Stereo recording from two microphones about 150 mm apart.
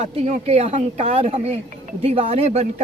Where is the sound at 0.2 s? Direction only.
45° right (ahead or behind).